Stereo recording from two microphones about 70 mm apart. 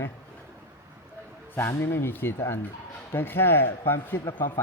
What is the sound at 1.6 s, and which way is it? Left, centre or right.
Speech, left.